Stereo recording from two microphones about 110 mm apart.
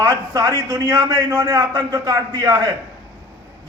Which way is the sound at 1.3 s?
20° right (ahead or behind).